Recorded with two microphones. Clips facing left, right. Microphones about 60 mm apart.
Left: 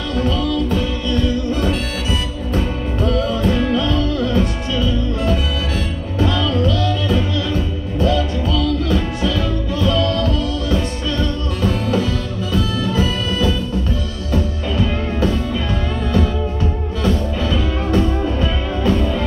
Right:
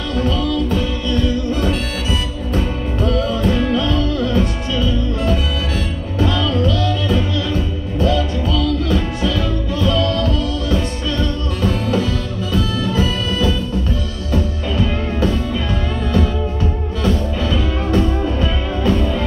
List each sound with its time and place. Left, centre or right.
3.3 s music: centre
6.1 s music: left
8.0 s music: left